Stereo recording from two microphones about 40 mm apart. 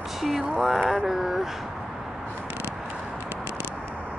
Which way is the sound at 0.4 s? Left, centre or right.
Centre.